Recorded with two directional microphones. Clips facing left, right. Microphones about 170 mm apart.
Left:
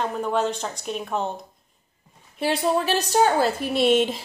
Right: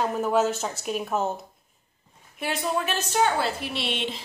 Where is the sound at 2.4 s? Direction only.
30° left (ahead or behind).